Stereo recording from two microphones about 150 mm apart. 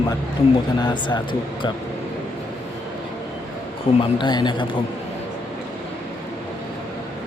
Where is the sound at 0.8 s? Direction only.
30° left (ahead or behind).